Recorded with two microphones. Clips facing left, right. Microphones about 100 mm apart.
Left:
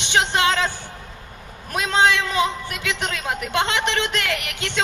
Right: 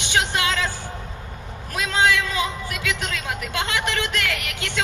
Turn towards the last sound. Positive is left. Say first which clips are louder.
# left 2 dB
turn(degrees=20)  # may be behind; listen again after turning